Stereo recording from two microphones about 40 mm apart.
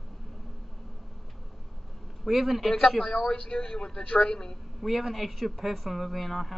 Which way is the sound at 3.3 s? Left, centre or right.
Left.